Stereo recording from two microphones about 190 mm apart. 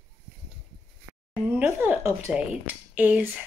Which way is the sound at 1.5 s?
10° right (ahead or behind).